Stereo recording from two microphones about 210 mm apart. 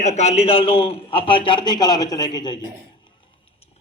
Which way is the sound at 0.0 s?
30° left (ahead or behind).